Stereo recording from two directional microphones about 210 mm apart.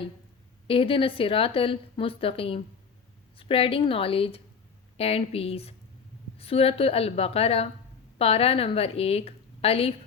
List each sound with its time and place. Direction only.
0.7 s a woman's voice: 25° left (ahead or behind)